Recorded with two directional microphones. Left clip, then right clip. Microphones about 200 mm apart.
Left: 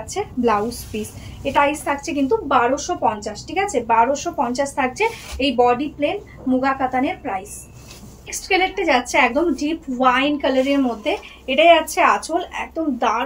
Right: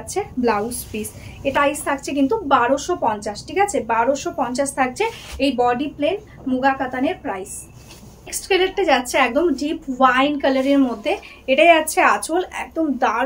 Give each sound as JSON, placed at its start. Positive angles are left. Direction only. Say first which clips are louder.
{"t": 0.1, "sound": "a woman's voice", "louder": "left 1 dB", "side_deg": -25}
{"t": 8.3, "sound": "a woman's voice", "louder": "even", "side_deg": -25}